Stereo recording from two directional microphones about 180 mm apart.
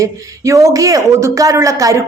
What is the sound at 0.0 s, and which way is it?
Speech, 15° right (ahead or behind).